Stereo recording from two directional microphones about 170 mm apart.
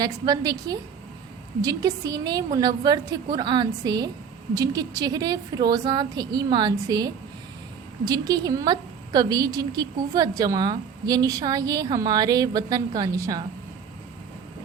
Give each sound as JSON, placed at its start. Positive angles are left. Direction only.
{"t": 0.0, "sound": "a woman's voice", "side_deg": -20}